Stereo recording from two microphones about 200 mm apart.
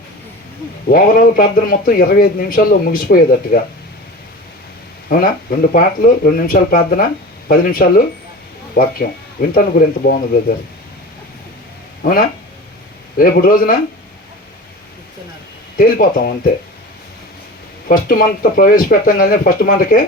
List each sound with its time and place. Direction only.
0.9 s speech: 45° left (ahead or behind)
5.0 s speech: 45° left (ahead or behind)
13.1 s speech: 45° left (ahead or behind)
15.8 s speech: 45° left (ahead or behind)
17.8 s speech: 45° left (ahead or behind)